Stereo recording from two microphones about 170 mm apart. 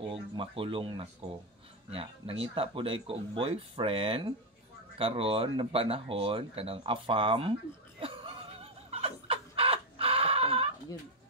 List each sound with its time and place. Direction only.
0.0 s speech: 30° right (ahead or behind)
8.5 s chicken: 35° right (ahead or behind)